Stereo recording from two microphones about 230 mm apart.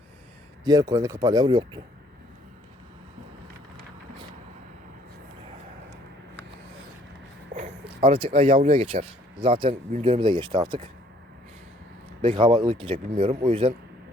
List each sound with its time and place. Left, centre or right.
0.6 s speech: centre
7.5 s speech: right
12.2 s speech: right